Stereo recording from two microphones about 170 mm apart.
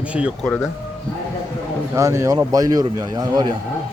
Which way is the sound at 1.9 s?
20° right (ahead or behind).